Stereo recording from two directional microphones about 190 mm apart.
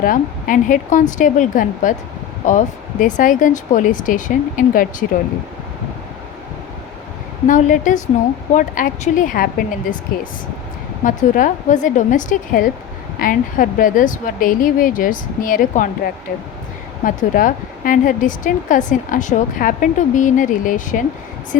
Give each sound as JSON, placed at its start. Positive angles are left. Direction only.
{"t": 0.0, "sound": "speech", "side_deg": 45}
{"t": 7.4, "sound": "a woman's voice", "side_deg": 40}
{"t": 11.0, "sound": "speech", "side_deg": 40}
{"t": 17.0, "sound": "speech", "side_deg": 45}